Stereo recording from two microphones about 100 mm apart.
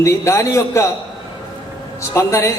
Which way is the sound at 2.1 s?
30° left (ahead or behind).